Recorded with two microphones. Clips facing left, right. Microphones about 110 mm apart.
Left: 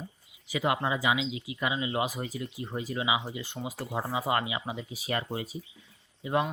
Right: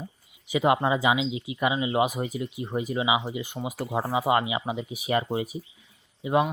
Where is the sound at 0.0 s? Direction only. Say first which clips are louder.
Right 3 dB; 20° right (ahead or behind).